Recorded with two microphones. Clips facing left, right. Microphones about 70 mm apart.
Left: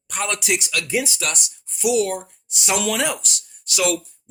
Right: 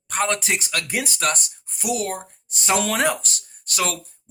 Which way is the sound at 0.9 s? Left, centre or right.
Right.